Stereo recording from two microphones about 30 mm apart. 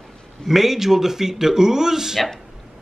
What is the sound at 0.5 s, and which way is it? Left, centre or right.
Speech, centre.